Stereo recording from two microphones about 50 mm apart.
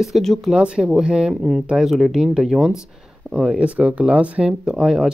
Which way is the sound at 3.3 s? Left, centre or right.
Right.